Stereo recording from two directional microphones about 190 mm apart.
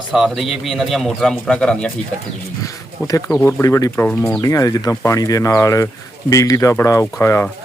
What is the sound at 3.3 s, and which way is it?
Speech, 10° left (ahead or behind).